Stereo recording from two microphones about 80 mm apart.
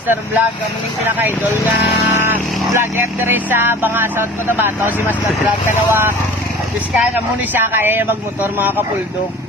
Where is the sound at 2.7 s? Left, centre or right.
Right.